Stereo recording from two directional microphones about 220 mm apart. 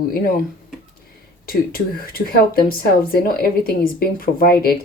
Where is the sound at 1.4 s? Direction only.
40° left (ahead or behind).